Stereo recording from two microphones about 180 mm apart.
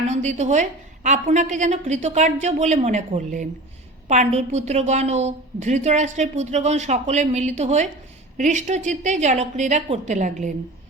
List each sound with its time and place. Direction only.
0.1 s a woman's voice: 40° right (ahead or behind)